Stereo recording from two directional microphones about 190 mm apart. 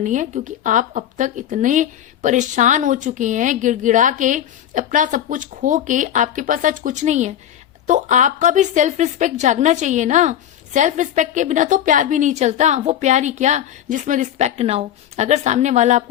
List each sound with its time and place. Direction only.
0.0 s speech: 40° right (ahead or behind)